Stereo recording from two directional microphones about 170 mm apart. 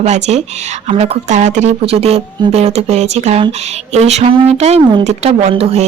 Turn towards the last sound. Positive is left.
turn(degrees=-35)  # may be behind; listen again after turning